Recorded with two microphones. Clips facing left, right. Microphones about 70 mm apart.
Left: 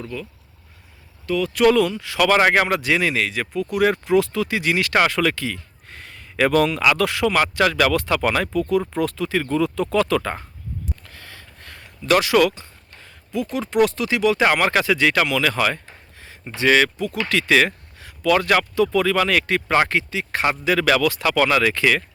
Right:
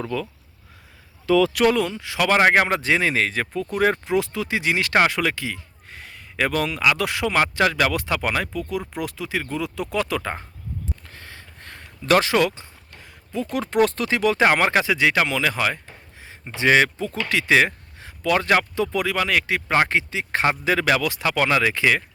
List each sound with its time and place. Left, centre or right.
1.6 s speech: right
5.9 s a sound: centre
7.0 s speech: right
11.1 s a sound: right
13.5 s speech: right
14.4 s speech: right
16.2 s speech: right
19.1 s speech: centre
19.9 s speech: right